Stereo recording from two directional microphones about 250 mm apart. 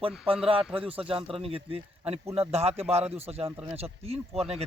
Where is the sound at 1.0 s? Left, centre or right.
Right.